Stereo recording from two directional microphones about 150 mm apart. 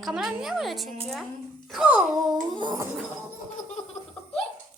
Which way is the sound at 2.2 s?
30° right (ahead or behind).